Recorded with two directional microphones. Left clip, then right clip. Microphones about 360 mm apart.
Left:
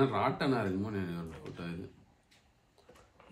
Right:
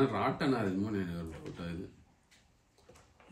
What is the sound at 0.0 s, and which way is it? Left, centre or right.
A man's voice, centre.